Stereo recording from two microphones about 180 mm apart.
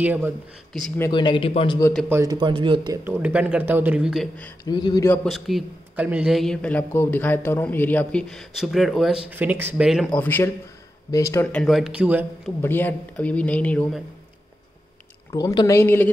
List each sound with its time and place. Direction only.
0.0 s speech: 10° right (ahead or behind)
1.1 s speech: 25° left (ahead or behind)
2.0 s speech: 20° right (ahead or behind)
3.0 s speech: 10° right (ahead or behind)
4.6 s speech: 25° left (ahead or behind)
5.0 s a man's voice: 5° left (ahead or behind)
10.1 s a woman's voice: 10° left (ahead or behind)
11.4 s a man's voice: 5° left (ahead or behind)
12.6 s a woman's voice: 10° left (ahead or behind)
15.3 s a woman's voice: 20° left (ahead or behind)